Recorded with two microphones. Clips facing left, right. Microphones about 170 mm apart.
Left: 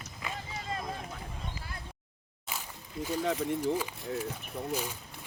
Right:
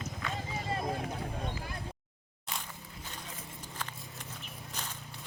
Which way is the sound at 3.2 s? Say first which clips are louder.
Left 17 dB; 75° left (ahead or behind).